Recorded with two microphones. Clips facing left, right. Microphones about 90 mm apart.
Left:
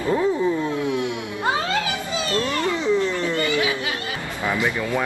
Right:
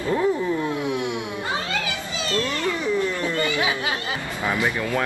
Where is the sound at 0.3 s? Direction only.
10° left (ahead or behind).